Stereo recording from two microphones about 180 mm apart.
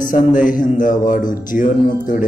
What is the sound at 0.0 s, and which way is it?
Speech, 45° left (ahead or behind).